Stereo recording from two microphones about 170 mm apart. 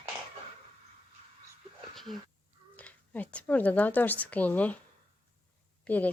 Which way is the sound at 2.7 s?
10° left (ahead or behind).